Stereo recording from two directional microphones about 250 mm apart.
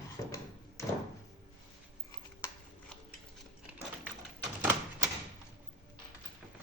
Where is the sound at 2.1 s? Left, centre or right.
Centre.